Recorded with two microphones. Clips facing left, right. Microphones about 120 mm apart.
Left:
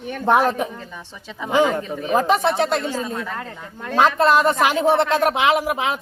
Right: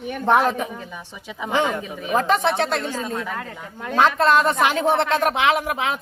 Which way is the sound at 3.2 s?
5° right (ahead or behind).